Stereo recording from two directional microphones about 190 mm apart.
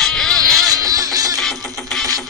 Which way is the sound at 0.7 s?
20° right (ahead or behind).